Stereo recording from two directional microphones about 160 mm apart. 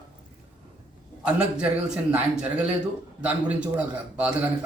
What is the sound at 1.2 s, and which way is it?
A man's voice, 5° right (ahead or behind).